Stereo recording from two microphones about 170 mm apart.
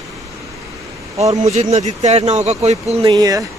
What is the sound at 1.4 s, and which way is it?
Speech, 40° right (ahead or behind).